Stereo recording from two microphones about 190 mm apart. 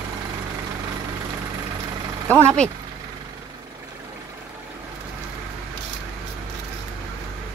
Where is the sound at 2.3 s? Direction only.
5° left (ahead or behind).